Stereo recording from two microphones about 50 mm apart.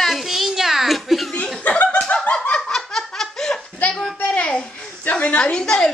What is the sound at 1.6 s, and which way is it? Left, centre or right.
Chuckle, left.